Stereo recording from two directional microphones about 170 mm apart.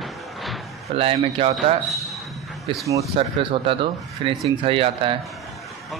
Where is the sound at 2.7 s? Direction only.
30° right (ahead or behind).